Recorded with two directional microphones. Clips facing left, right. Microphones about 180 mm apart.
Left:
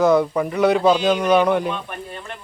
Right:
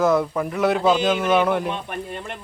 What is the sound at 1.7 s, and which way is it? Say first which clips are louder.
Speech: right 1 dB; 15° right (ahead or behind).